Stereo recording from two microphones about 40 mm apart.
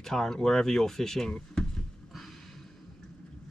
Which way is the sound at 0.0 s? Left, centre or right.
Centre.